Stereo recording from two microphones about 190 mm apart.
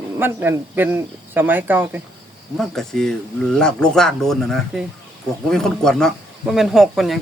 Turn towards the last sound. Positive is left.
turn(degrees=0)  # may be behind; listen again after turning